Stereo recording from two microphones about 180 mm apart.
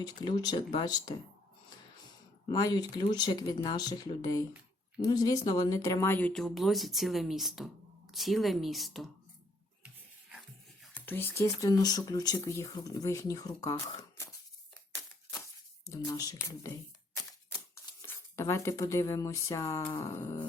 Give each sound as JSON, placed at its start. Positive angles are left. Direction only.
{"t": 0.0, "sound": "speech", "side_deg": 20}
{"t": 2.5, "sound": "speech", "side_deg": 20}
{"t": 10.9, "sound": "speech", "side_deg": 10}
{"t": 15.9, "sound": "speech", "side_deg": 20}
{"t": 18.0, "sound": "speech", "side_deg": 15}